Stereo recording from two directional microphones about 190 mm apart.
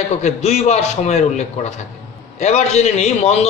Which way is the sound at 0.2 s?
35° left (ahead or behind).